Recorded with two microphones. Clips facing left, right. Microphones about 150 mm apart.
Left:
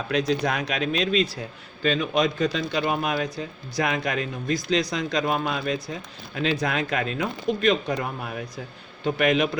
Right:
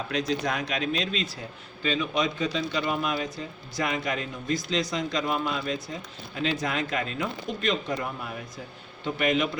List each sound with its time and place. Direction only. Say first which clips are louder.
0.1 s a man's voice: left 5 dB; 65° left (ahead or behind)
9.0 s a man's voice: left 4 dB; 65° left (ahead or behind)